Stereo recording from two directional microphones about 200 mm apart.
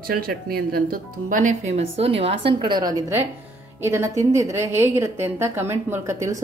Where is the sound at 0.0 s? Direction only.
50° right (ahead or behind).